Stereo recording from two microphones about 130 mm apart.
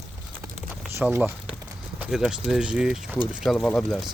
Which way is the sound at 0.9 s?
15° right (ahead or behind).